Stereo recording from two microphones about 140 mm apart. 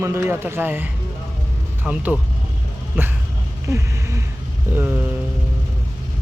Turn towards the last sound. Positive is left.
turn(degrees=-15)  # may be behind; listen again after turning